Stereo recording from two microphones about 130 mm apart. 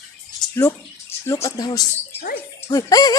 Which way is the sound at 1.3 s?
25° left (ahead or behind).